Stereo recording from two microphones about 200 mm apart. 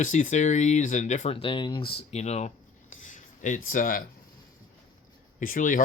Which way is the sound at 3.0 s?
40° left (ahead or behind).